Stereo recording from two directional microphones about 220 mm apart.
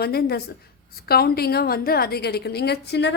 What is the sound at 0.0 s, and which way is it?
A woman's voice, 45° left (ahead or behind).